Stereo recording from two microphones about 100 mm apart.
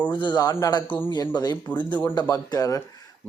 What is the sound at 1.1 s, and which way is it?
Speech, 45° left (ahead or behind).